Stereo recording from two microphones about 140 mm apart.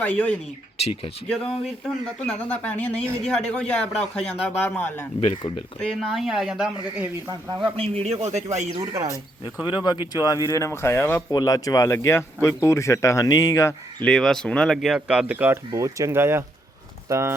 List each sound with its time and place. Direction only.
0.0 s a man's voice: 10° left (ahead or behind)
0.8 s speech: 45° left (ahead or behind)
1.3 s a man's voice: 5° left (ahead or behind)
5.2 s speech: 35° left (ahead or behind)
5.8 s speech: 5° left (ahead or behind)
7.8 s a man's voice: 50° right (ahead or behind)
8.8 s speech: 25° right (ahead or behind)
9.6 s speech: 30° left (ahead or behind)
14.0 s speech: 5° left (ahead or behind); by 17.3 s 20° right (ahead or behind)